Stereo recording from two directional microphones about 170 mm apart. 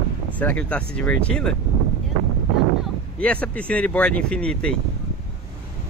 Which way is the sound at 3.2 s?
5° left (ahead or behind).